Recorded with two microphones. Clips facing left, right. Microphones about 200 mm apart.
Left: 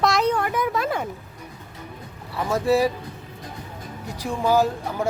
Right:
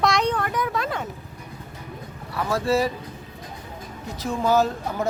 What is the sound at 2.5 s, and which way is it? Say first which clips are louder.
Speech: left 2 dB; 15° left (ahead or behind).